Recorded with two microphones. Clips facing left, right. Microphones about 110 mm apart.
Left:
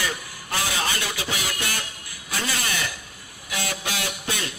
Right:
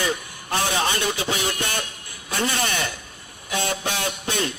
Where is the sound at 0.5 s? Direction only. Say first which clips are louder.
Right 4 dB; 30° right (ahead or behind).